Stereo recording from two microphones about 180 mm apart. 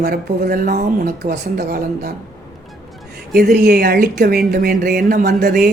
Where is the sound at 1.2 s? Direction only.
65° right (ahead or behind).